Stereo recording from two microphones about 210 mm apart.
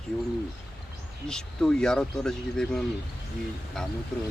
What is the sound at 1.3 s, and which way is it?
Speech, 5° left (ahead or behind).